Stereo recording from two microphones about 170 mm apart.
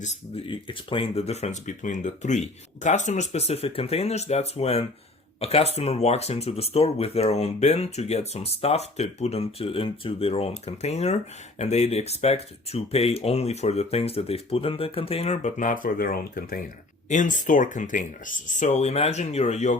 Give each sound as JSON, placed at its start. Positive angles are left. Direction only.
{"t": 0.0, "sound": "speech", "side_deg": 40}